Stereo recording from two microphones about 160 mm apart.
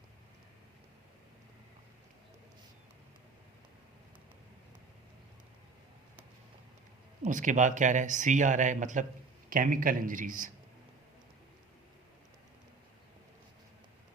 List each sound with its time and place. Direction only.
7.3 s a man's voice: 55° right (ahead or behind)